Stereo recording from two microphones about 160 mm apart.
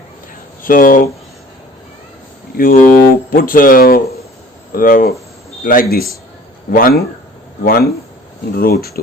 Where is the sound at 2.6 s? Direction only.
60° left (ahead or behind).